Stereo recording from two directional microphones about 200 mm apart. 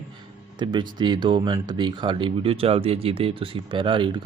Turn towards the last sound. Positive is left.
turn(degrees=-25)  # may be behind; listen again after turning